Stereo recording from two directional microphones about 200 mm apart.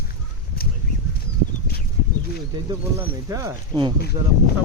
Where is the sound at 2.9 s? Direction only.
15° right (ahead or behind).